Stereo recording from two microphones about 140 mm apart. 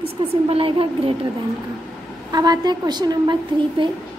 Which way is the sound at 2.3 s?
30° right (ahead or behind).